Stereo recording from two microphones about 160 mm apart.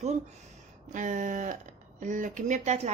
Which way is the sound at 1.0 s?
50° right (ahead or behind).